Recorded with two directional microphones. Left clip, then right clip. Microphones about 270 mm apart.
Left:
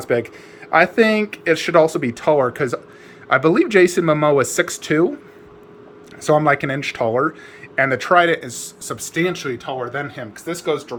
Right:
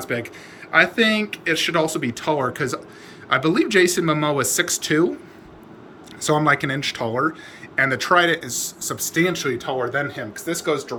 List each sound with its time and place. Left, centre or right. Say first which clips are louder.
0.0 s speech: left 6 dB; centre
6.2 s speech: left 3 dB; centre